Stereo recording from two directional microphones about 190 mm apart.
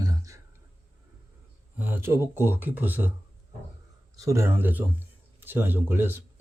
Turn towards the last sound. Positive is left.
turn(degrees=-10)  # may be behind; listen again after turning